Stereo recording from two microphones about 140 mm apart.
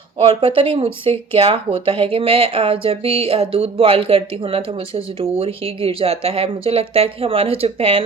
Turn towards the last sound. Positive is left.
turn(degrees=-45)  # may be behind; listen again after turning